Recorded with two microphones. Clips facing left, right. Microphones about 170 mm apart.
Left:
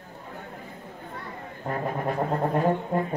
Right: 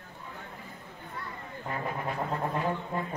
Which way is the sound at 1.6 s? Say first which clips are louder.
Left 6 dB; 45° left (ahead or behind).